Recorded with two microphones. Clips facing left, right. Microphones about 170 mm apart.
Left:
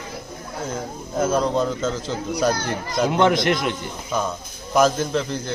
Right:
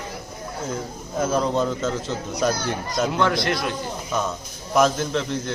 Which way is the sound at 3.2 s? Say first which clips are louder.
Left 6 dB; 20° left (ahead or behind).